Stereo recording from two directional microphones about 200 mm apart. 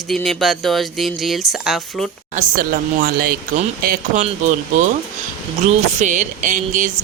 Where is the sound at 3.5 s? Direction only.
40° right (ahead or behind).